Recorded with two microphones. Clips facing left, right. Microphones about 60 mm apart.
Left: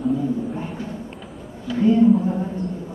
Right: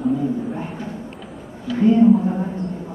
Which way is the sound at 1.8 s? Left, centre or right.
Right.